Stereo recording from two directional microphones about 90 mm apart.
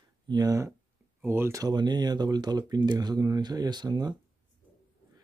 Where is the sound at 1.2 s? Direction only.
25° right (ahead or behind).